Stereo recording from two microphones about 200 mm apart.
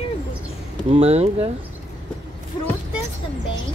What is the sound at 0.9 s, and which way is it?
Speech, 30° right (ahead or behind).